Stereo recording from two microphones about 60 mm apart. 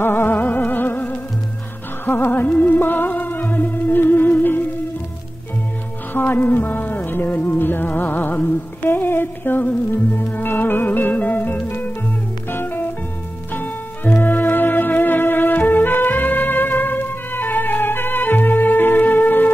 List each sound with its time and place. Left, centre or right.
0.0 s music: left
6.1 s music: left